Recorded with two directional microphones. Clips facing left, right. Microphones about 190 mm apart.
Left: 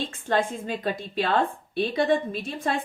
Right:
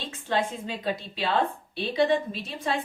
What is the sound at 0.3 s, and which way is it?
Speech, 50° left (ahead or behind).